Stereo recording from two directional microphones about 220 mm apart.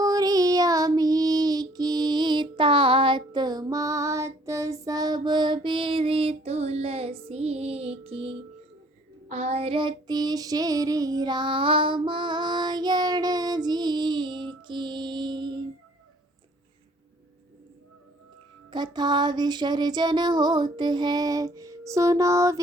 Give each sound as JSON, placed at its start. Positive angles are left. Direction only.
{"t": 0.0, "sound": "child singing", "side_deg": -15}
{"t": 18.7, "sound": "female singing", "side_deg": -20}